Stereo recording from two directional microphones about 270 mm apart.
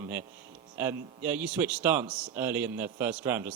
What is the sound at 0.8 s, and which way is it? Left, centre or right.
Speech, centre.